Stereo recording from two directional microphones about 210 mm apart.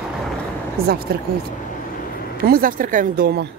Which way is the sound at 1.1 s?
50° right (ahead or behind).